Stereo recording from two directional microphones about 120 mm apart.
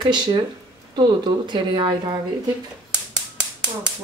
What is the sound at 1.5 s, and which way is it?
Speech, 40° right (ahead or behind).